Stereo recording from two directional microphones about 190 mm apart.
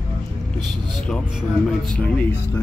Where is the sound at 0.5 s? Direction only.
25° right (ahead or behind).